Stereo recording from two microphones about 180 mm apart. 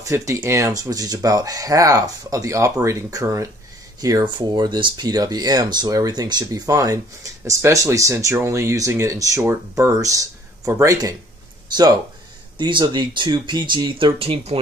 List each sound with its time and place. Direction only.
0.0 s speech: 15° right (ahead or behind); by 14.6 s 35° right (ahead or behind)